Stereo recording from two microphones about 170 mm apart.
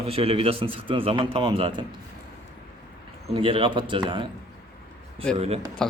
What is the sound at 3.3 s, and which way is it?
Speech, 30° right (ahead or behind).